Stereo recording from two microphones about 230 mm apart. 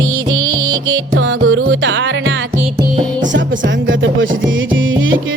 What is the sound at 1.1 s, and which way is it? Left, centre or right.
Music, right.